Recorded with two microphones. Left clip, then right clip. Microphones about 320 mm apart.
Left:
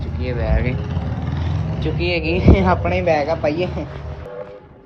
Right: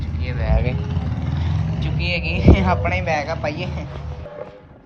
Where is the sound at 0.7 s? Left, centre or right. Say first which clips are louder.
Left 2 dB; centre.